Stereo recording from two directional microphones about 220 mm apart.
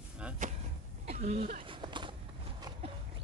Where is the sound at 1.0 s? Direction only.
30° right (ahead or behind).